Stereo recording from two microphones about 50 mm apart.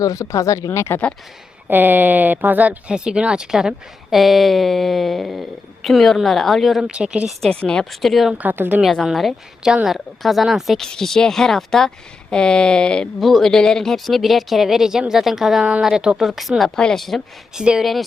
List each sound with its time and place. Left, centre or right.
0.3 s speech: left
1.7 s speech: right
2.9 s speech: centre
4.1 s speech: centre
6.9 s speech: right
7.5 s a woman's voice: centre
7.9 s speech: centre
8.4 s speech: right
9.8 s speech: centre
10.8 s speech: centre
13.1 s speech: centre
16.7 s speech: centre
17.0 s speech: centre
17.5 s speech: centre